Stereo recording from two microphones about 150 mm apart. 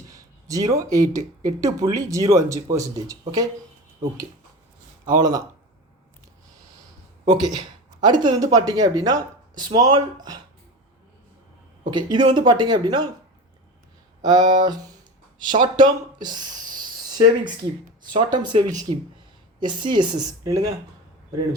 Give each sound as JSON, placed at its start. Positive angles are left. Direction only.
{"t": 0.1, "sound": "a sound", "side_deg": -25}
{"t": 0.8, "sound": "speech", "side_deg": -25}
{"t": 5.0, "sound": "speech", "side_deg": -25}
{"t": 7.3, "sound": "speech", "side_deg": -25}
{"t": 11.9, "sound": "speech", "side_deg": -30}
{"t": 14.3, "sound": "speech", "side_deg": -30}
{"t": 16.2, "sound": "a sound", "side_deg": -30}
{"t": 18.1, "sound": "speech", "side_deg": -30}